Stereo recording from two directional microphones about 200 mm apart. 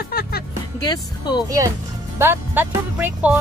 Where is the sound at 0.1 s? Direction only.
50° left (ahead or behind).